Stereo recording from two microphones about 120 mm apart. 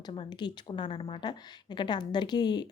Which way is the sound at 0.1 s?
45° left (ahead or behind).